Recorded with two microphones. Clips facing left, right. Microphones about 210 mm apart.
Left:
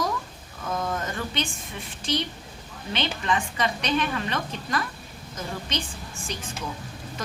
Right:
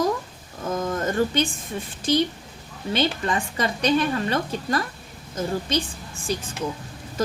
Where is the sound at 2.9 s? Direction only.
40° right (ahead or behind).